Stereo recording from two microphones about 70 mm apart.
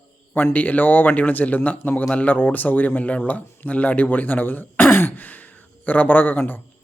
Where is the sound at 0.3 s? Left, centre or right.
Left.